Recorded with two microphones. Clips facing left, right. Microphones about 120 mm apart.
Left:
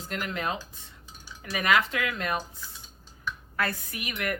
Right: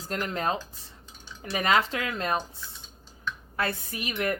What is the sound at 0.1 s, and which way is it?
Speech, 35° right (ahead or behind).